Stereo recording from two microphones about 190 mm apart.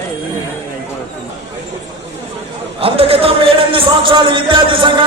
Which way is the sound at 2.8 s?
30° right (ahead or behind).